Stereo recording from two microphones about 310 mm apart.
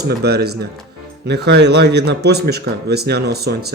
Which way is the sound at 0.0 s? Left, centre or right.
Right.